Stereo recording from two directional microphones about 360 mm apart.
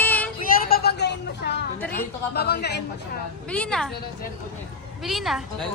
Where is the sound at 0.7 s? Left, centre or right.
Left.